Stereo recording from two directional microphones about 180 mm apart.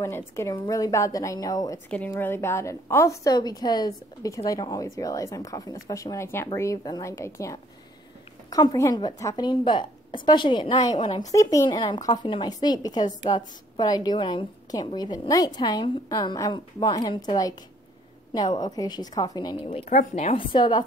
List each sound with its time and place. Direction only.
0.4 s a woman's voice: 20° left (ahead or behind); by 20.4 s 40° left (ahead or behind)
20.5 s a woman's voice: 25° left (ahead or behind)